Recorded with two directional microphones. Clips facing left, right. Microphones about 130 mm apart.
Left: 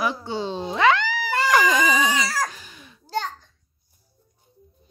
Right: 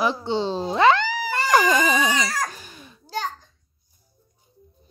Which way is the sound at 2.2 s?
5° left (ahead or behind).